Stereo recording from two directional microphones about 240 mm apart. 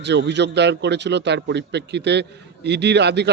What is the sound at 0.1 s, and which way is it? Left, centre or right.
A man's voice, right.